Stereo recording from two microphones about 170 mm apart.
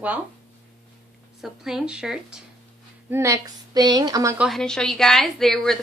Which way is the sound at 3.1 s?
15° right (ahead or behind).